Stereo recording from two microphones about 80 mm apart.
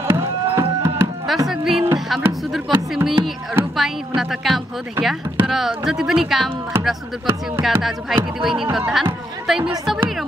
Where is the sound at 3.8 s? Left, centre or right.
Centre.